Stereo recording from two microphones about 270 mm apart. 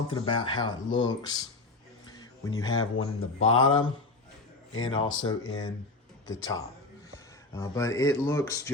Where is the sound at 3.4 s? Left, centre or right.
Left.